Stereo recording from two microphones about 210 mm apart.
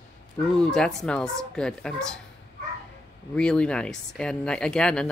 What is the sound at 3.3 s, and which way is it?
Speech, 5° left (ahead or behind).